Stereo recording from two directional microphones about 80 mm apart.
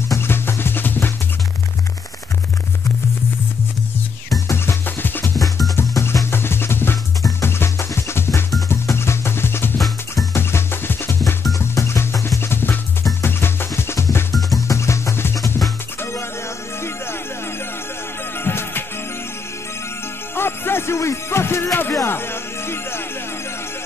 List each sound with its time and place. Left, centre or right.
0.1 s music: left
4.5 s music: left
18.4 s music: left
20.3 s music: left